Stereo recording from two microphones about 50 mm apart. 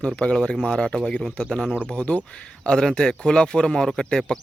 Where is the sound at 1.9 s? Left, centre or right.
Left.